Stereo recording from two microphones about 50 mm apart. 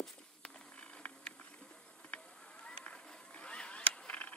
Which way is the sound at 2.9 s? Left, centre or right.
Left.